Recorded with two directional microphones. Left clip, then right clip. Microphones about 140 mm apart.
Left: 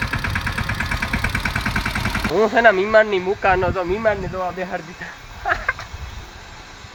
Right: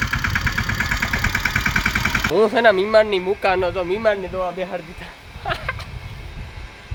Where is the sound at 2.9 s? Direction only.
10° right (ahead or behind); by 4.0 s 10° left (ahead or behind).